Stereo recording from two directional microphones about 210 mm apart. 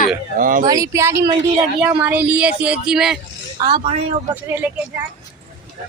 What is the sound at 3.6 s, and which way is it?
Speech, 15° right (ahead or behind).